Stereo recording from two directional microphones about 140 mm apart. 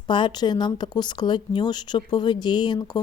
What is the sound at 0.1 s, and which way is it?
A woman's voice, 35° left (ahead or behind).